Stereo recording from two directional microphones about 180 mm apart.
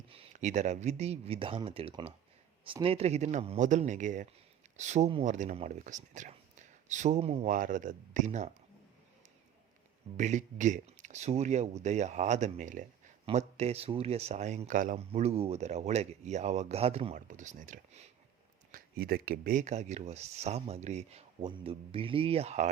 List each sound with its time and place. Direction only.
0.1 s speech: 35° right (ahead or behind)
7.4 s speech: 50° right (ahead or behind)
10.2 s speech: 40° right (ahead or behind)
18.7 s speech: 60° right (ahead or behind); by 22.7 s 40° right (ahead or behind)